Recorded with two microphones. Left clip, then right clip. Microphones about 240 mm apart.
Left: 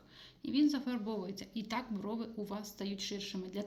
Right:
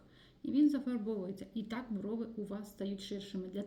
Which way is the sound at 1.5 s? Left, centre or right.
Left.